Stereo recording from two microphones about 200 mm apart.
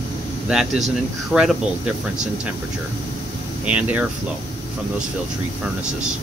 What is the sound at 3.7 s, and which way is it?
Speech, 5° right (ahead or behind).